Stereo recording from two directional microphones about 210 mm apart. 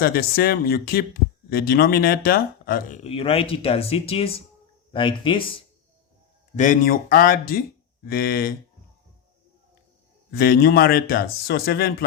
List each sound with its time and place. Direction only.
0.0 s speech: 45° left (ahead or behind)
3.0 s speech: 25° left (ahead or behind)
6.6 s speech: 40° left (ahead or behind)
10.3 s speech: 50° left (ahead or behind)